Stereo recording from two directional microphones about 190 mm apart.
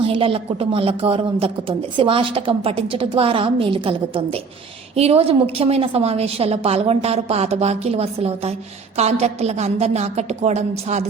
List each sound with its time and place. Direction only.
0.0 s a woman's voice: 30° right (ahead or behind)